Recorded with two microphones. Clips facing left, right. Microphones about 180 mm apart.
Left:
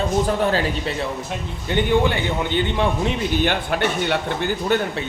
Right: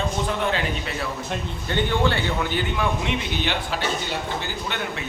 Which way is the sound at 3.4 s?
55° left (ahead or behind).